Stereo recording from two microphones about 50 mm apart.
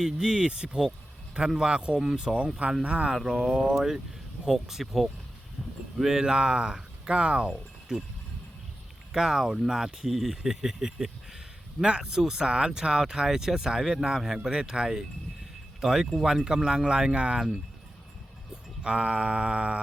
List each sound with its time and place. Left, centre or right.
0.0 s speech: centre
3.7 s speech: centre
9.1 s speech: centre